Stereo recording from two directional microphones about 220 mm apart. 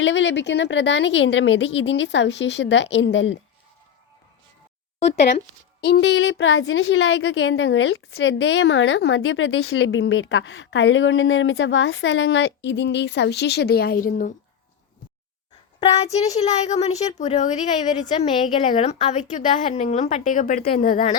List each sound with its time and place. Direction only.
0.0 s a woman's voice: 55° left (ahead or behind)
5.8 s a woman's voice: 50° left (ahead or behind)
16.1 s a woman's voice: 30° left (ahead or behind)